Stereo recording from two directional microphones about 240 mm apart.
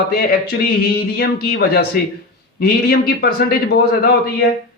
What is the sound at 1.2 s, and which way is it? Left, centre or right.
Speech, left.